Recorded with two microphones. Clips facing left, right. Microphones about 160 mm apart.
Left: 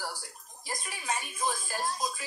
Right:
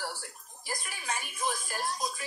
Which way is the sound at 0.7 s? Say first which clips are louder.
Left 2 dB; 20° left (ahead or behind).